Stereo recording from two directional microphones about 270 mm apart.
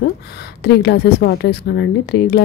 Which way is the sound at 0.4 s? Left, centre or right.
Left.